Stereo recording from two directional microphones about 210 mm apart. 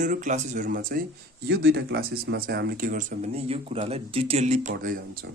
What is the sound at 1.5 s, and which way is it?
Speech, 50° right (ahead or behind).